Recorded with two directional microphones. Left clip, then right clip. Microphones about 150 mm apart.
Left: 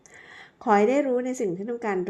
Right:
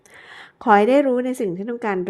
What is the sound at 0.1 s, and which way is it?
A woman's voice, 30° right (ahead or behind).